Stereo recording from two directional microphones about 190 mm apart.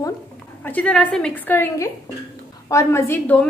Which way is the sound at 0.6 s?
5° left (ahead or behind).